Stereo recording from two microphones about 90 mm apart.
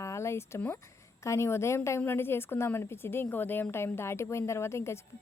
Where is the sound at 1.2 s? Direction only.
30° left (ahead or behind).